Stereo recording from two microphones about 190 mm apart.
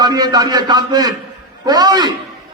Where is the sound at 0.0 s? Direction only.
20° right (ahead or behind).